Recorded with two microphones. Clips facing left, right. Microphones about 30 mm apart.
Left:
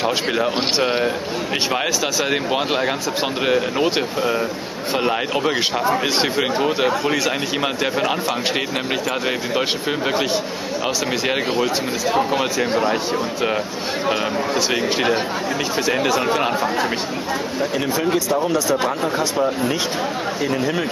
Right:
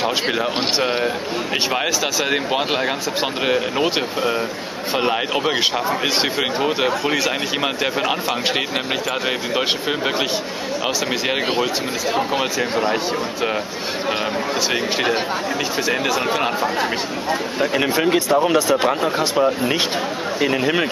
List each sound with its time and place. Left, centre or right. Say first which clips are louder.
0.0 s speech: even; centre
2.3 s speech: even; centre
9.6 s speech: right 1 dB; centre
11.6 s speech: left 1 dB; centre
15.9 s speech: left 2 dB; centre
17.3 s speech: right 3 dB; right
20.4 s speech: right 4 dB; right